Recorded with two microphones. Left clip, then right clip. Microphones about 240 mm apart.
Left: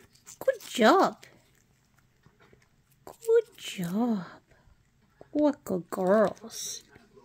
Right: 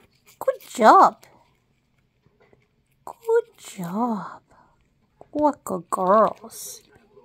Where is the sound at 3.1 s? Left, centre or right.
Centre.